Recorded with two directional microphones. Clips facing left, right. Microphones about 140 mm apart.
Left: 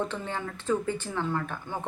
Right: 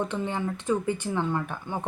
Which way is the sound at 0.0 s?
15° right (ahead or behind).